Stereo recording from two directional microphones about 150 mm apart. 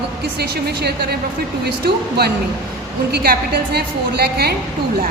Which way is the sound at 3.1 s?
90° right.